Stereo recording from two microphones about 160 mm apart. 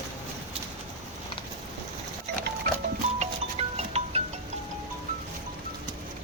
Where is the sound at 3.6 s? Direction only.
40° right (ahead or behind).